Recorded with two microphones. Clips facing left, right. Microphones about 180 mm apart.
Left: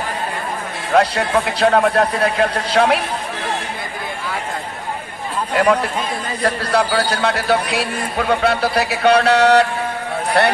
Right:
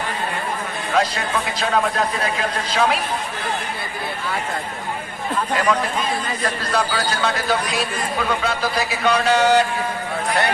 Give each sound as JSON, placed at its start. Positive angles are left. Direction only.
{"t": 0.9, "sound": "a man's voice", "side_deg": 65}
{"t": 5.6, "sound": "a man's voice", "side_deg": 60}